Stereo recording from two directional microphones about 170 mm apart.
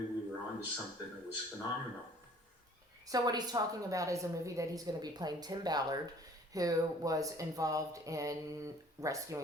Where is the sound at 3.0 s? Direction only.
20° right (ahead or behind).